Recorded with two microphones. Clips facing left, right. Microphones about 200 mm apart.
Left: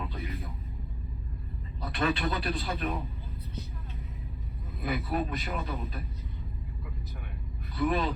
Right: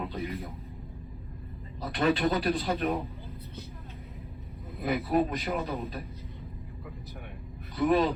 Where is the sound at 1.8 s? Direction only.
35° right (ahead or behind).